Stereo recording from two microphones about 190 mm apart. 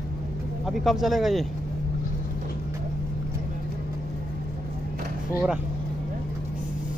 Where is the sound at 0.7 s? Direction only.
Centre (ahead or behind).